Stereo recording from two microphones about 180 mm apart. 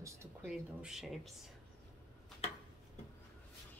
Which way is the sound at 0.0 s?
10° right (ahead or behind).